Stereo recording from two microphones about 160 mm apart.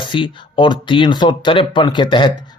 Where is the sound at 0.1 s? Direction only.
30° left (ahead or behind).